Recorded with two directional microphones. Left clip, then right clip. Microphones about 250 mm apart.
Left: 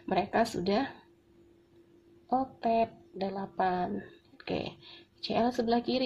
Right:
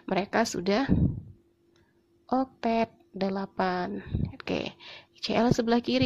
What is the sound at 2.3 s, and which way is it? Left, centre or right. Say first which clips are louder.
Speech: right 1 dB; right.